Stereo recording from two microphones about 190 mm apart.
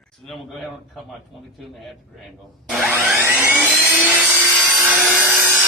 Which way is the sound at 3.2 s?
10° right (ahead or behind).